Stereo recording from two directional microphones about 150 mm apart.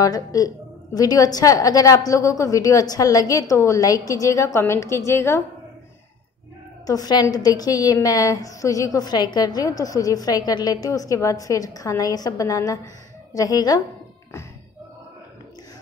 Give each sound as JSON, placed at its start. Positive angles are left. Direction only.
{"t": 0.0, "sound": "a woman's voice", "side_deg": 25}
{"t": 6.9, "sound": "a woman's voice", "side_deg": 25}